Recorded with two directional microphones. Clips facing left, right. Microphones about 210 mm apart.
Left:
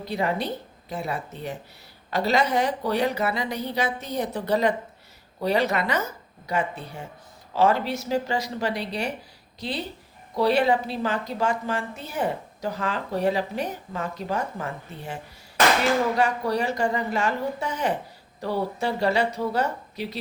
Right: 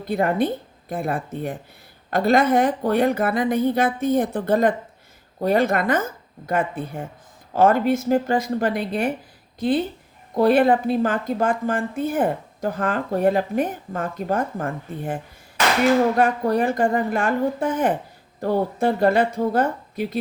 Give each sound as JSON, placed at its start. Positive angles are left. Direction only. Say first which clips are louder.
{"t": 0.0, "sound": "a woman's voice", "louder": "right 6 dB", "side_deg": -50}